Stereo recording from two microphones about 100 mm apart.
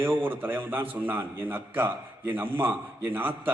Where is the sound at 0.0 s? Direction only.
20° right (ahead or behind).